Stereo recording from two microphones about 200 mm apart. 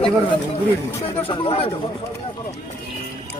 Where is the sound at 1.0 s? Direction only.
25° left (ahead or behind).